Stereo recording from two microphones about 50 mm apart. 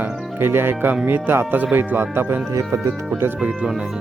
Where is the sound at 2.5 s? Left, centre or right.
Right.